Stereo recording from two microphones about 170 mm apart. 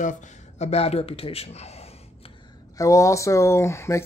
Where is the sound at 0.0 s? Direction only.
45° left (ahead or behind).